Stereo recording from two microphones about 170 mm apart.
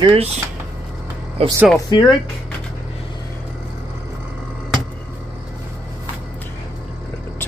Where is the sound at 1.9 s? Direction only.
25° left (ahead or behind).